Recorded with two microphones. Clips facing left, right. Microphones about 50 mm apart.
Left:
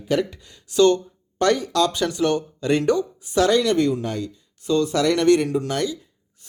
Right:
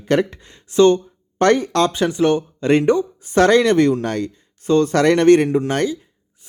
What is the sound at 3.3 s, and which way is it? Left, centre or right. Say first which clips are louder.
Speech: right 5 dB; right.